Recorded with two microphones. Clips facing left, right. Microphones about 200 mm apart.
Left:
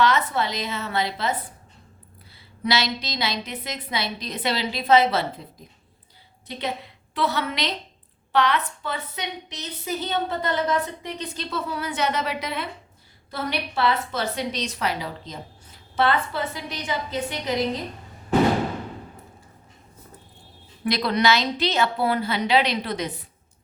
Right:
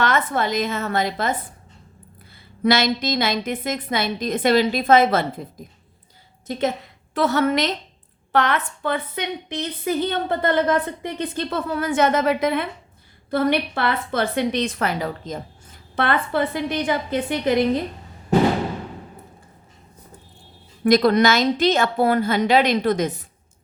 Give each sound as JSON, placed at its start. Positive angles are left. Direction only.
{"t": 0.0, "sound": "a woman's voice", "side_deg": -50}
{"t": 2.6, "sound": "a woman's voice", "side_deg": -50}
{"t": 6.5, "sound": "a woman's voice", "side_deg": -45}
{"t": 20.8, "sound": "a woman's voice", "side_deg": -45}